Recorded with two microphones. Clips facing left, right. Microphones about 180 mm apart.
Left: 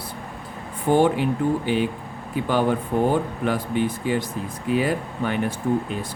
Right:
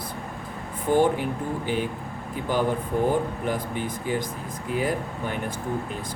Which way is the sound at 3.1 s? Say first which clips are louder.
Left 3 dB; 70° left (ahead or behind).